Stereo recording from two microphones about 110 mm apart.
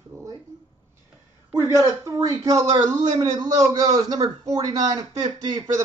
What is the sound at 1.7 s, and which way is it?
A man's voice, 30° right (ahead or behind).